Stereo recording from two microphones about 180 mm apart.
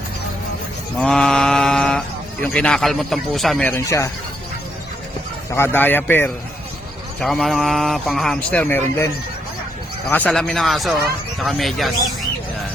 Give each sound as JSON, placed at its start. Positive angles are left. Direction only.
{"t": 0.9, "sound": "speech", "side_deg": 5}
{"t": 5.5, "sound": "speech", "side_deg": 10}
{"t": 10.1, "sound": "speech", "side_deg": 10}